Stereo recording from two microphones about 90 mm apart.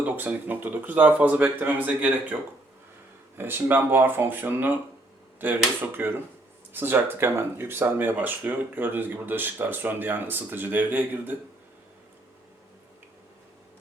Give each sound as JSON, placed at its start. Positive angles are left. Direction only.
{"t": 0.0, "sound": "speech", "side_deg": -20}
{"t": 3.3, "sound": "speech", "side_deg": -25}